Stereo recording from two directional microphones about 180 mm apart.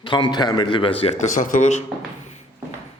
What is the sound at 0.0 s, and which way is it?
A man's voice, 25° left (ahead or behind).